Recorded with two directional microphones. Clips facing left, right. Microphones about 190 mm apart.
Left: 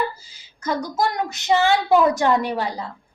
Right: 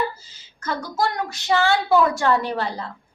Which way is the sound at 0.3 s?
15° left (ahead or behind).